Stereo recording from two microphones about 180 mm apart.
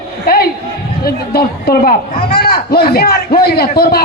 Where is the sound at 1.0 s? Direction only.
60° left (ahead or behind).